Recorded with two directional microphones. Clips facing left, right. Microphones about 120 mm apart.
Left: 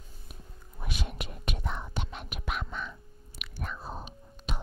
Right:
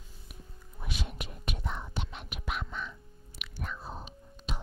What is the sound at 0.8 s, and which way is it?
Whispering, 60° left (ahead or behind).